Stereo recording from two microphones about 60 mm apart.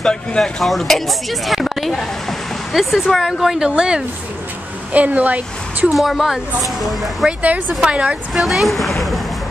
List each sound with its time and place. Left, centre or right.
0.0 s speech: centre
0.4 s speech: centre
4.9 s speech: right
5.9 s speech: centre
7.4 s speech: right
8.3 s speech: centre